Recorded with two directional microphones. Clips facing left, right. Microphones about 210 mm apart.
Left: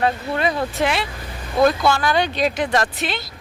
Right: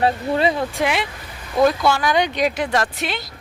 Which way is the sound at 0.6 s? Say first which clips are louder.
Even; 10° right (ahead or behind).